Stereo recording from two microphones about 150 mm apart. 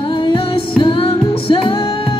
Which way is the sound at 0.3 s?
35° left (ahead or behind).